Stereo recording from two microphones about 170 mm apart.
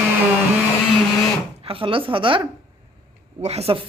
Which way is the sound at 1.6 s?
30° right (ahead or behind).